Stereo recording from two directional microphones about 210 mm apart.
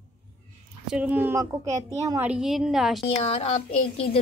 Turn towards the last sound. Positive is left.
turn(degrees=25)  # may be behind; listen again after turning